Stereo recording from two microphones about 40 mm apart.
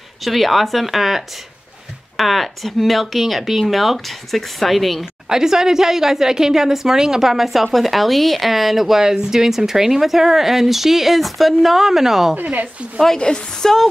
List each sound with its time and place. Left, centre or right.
0.2 s speech: centre
5.3 s a woman's voice: centre
12.4 s a woman's voice: right
13.0 s a woman's voice: centre